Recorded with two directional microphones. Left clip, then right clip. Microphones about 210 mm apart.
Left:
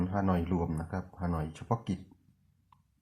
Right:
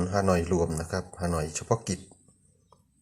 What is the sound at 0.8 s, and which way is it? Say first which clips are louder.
Speech: right 7 dB; 30° right (ahead or behind).